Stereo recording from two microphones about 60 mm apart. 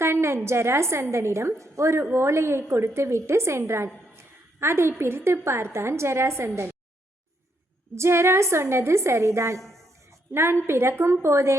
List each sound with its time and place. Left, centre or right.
0.0 s a woman's voice: right
7.9 s a woman's voice: right
9.6 s speech: centre
10.1 s a sound: right
10.7 s a woman's voice: right